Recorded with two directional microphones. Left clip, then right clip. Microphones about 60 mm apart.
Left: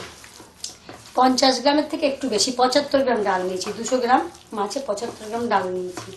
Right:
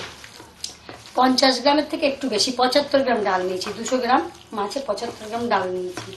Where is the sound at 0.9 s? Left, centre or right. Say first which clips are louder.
Left 1 dB; centre.